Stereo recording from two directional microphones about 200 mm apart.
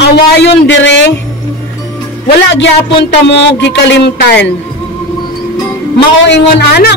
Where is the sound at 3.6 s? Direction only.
60° left (ahead or behind).